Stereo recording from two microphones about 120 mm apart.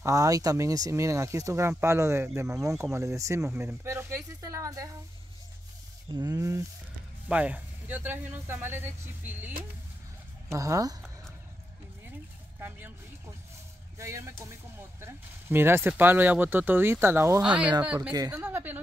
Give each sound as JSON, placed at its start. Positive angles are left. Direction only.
{"t": 0.0, "sound": "speech", "side_deg": -25}
{"t": 6.1, "sound": "speech", "side_deg": -30}
{"t": 7.2, "sound": "speech", "side_deg": -10}
{"t": 10.5, "sound": "speech", "side_deg": -25}
{"t": 12.5, "sound": "speech", "side_deg": -15}
{"t": 13.9, "sound": "speech", "side_deg": -25}
{"t": 18.1, "sound": "speech", "side_deg": -30}
{"t": 18.4, "sound": "a sound", "side_deg": -15}